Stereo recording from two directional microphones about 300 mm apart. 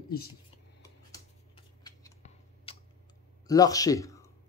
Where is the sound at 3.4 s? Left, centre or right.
Centre.